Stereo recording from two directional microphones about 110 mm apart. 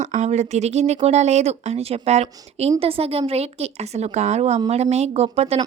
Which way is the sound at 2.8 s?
60° right (ahead or behind).